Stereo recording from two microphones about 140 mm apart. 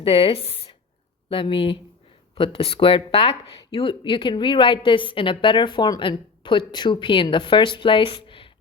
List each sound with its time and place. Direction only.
0.0 s speech: 40° left (ahead or behind)